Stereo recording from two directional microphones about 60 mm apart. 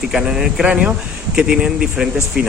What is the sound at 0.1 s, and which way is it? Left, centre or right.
Speech, centre.